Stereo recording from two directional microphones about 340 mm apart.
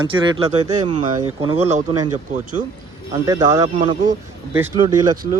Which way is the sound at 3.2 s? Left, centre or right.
Centre.